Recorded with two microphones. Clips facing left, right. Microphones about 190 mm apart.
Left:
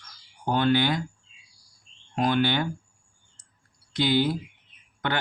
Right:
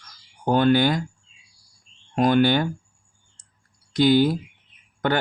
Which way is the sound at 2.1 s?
45° right (ahead or behind).